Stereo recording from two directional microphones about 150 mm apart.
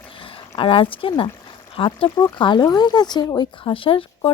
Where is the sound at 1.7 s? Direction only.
35° left (ahead or behind).